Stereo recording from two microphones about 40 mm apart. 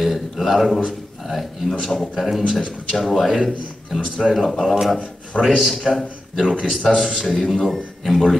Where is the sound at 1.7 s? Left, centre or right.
Centre.